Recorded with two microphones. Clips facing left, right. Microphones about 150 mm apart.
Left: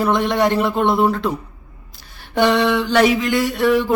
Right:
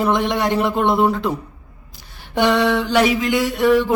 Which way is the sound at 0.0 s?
15° right (ahead or behind).